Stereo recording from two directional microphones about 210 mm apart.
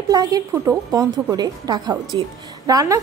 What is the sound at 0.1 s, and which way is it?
A woman's voice, 15° right (ahead or behind).